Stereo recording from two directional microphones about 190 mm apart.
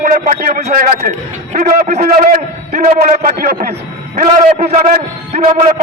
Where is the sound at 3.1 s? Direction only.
50° right (ahead or behind).